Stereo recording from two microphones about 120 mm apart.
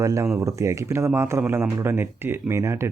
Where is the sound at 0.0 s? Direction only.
25° right (ahead or behind).